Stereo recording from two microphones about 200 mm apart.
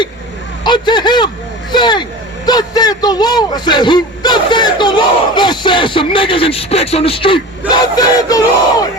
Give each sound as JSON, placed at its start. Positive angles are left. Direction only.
{"t": 0.6, "sound": "speech", "side_deg": 20}